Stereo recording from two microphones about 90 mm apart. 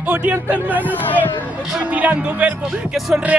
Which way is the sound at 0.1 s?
20° right (ahead or behind).